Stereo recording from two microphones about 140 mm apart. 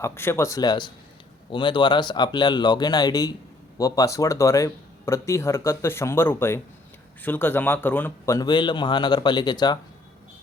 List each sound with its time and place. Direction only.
0.0 s speech: 15° left (ahead or behind)
8.4 s speech: 35° left (ahead or behind)